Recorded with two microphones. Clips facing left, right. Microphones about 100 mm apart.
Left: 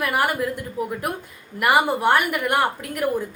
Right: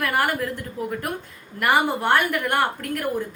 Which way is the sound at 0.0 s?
10° left (ahead or behind).